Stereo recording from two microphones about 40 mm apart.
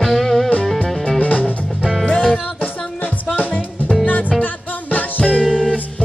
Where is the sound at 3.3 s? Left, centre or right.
Left.